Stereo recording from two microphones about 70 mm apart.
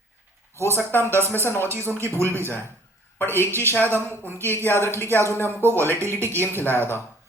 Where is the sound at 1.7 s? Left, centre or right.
Right.